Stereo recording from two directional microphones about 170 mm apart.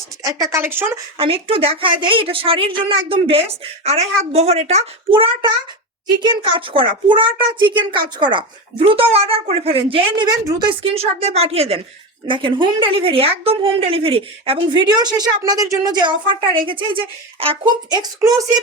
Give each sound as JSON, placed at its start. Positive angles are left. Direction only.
{"t": 0.2, "sound": "a sound", "side_deg": -20}
{"t": 0.5, "sound": "speech", "side_deg": -15}
{"t": 1.2, "sound": "a woman's voice", "side_deg": -30}